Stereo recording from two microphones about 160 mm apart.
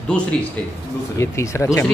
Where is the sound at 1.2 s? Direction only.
20° left (ahead or behind).